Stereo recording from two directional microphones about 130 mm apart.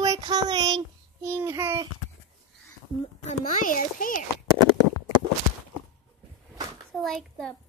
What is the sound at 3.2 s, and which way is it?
A child's voice, 90° left.